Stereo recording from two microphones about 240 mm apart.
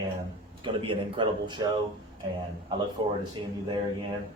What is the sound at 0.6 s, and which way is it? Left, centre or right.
Speech, right.